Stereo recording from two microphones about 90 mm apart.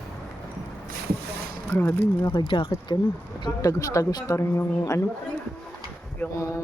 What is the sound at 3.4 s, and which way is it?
Speech, 40° left (ahead or behind).